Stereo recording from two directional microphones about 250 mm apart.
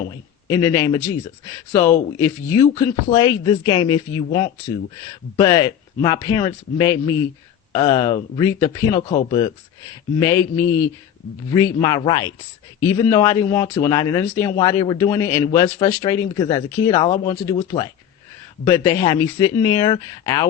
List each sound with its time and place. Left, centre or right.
0.4 s a man's voice: centre